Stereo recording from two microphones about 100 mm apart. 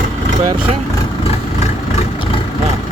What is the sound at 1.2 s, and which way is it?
Vehicle, 80° left.